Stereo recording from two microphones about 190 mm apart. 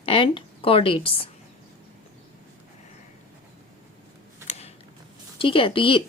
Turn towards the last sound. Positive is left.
turn(degrees=25)  # may be behind; listen again after turning